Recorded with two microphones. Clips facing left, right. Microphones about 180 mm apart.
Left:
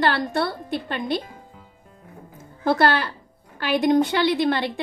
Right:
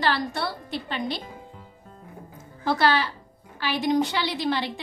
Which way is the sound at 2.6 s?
55° left (ahead or behind).